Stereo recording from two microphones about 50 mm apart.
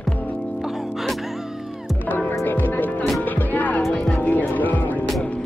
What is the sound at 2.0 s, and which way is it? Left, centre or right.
Music, left.